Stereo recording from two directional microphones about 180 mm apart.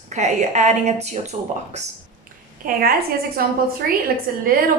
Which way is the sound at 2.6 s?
50° right (ahead or behind).